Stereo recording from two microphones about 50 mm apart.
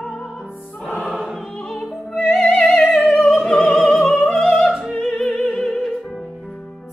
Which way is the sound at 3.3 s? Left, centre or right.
Centre.